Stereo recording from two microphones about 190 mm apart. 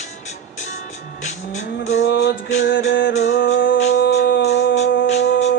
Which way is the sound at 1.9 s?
75° left (ahead or behind).